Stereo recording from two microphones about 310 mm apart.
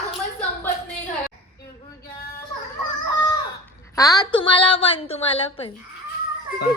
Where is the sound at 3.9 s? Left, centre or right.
Centre.